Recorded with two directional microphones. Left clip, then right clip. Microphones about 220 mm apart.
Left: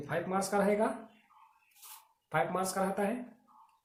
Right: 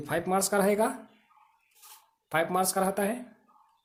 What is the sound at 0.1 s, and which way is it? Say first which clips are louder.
Speech: right 5 dB; 50° right (ahead or behind).